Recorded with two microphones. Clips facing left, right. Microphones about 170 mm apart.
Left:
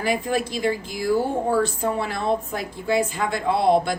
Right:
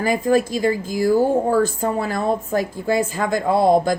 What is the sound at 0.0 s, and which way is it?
A woman's voice, 45° right (ahead or behind).